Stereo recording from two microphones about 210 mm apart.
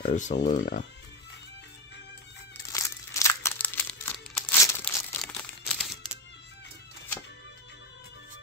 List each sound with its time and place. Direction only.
0.0 s speech: 35° left (ahead or behind)
2.7 s crumpling: 15° left (ahead or behind)